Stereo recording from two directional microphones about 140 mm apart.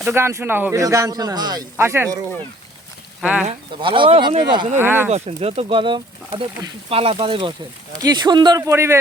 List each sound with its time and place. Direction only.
0.0 s a man's voice: 15° right (ahead or behind)
1.7 s a man's voice: 15° right (ahead or behind)
3.2 s speech: 10° right (ahead or behind)
3.8 s speech: 35° right (ahead or behind)
4.8 s speech: 15° right (ahead or behind)
5.1 s a man's voice: 50° right (ahead or behind); by 9.0 s 20° right (ahead or behind)